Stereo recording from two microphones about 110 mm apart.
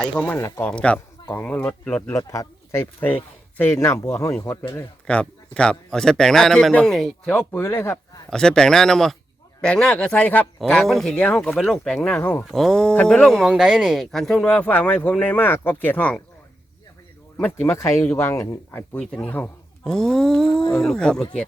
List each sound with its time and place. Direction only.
0.0 s speech: 5° left (ahead or behind)
0.3 s speech: 25° left (ahead or behind)
0.6 s speech: 10° left (ahead or behind)
2.0 s speech: 25° left (ahead or behind)
5.0 s a man's voice: 10° left (ahead or behind)
7.3 s speech: 15° left (ahead or behind)
8.3 s a man's voice: 5° left (ahead or behind)
10.6 s speech: 5° left (ahead or behind)
12.2 s speech: 20° left (ahead or behind)
12.5 s a man's voice: 5° left (ahead or behind)
14.5 s speech: 15° left (ahead or behind)
17.3 s speech: 20° left (ahead or behind)
18.9 s a man's voice: 10° left (ahead or behind)